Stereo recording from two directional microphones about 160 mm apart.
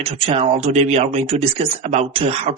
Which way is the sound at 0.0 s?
40° right (ahead or behind).